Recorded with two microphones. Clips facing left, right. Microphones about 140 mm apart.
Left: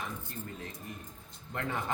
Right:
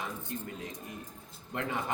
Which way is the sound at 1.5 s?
20° right (ahead or behind).